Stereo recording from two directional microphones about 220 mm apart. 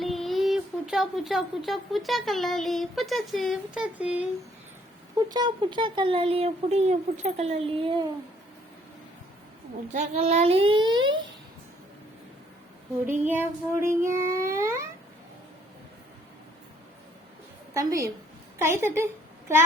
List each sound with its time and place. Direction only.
0.0 s speech: centre (ahead or behind)
5.3 s speech: 20° right (ahead or behind)
9.9 s speech: 30° right (ahead or behind)
13.2 s music: 10° right (ahead or behind)
14.1 s a sound: 15° right (ahead or behind)
17.7 s music: 15° right (ahead or behind)
18.6 s a woman's voice: 10° right (ahead or behind)